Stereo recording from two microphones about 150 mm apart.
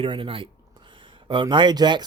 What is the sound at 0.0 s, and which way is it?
Speech, 35° right (ahead or behind).